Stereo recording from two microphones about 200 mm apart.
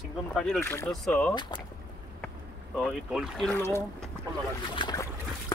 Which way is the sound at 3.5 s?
10° left (ahead or behind).